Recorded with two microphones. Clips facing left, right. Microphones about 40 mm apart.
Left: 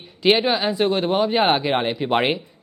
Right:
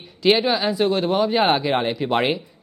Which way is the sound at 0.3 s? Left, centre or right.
Centre.